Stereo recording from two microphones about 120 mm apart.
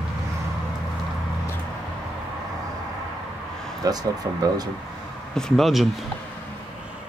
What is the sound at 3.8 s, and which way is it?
Speech, 30° right (ahead or behind).